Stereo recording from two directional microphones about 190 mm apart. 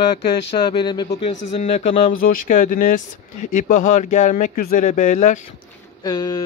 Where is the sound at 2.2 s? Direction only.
45° left (ahead or behind).